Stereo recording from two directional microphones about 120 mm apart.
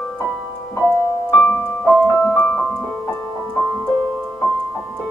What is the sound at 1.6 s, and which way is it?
Keyboard, 15° left (ahead or behind).